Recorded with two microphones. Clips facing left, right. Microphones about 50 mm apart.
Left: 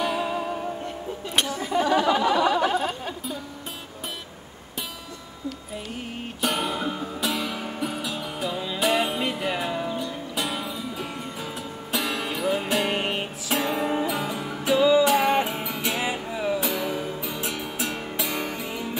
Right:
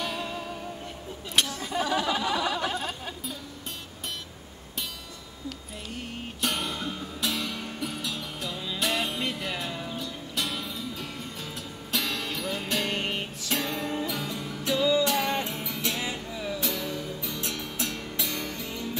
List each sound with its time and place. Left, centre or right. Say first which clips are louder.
0.0 s music: left 7 dB; centre
6.4 s music: left 5 dB; centre
16.3 s music: left 6 dB; left